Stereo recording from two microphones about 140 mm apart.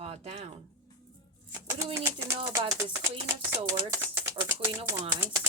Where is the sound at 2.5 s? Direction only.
20° right (ahead or behind).